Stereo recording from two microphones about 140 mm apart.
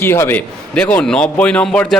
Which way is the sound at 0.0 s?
15° left (ahead or behind).